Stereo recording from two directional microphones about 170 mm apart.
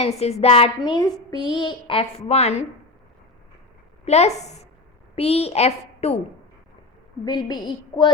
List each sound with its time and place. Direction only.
0.0 s speech: 40° left (ahead or behind)
0.8 s a child's voice: 25° left (ahead or behind); by 2.6 s 40° left (ahead or behind)
4.0 s a woman's voice: 40° left (ahead or behind)
7.3 s a child's voice: 25° left (ahead or behind)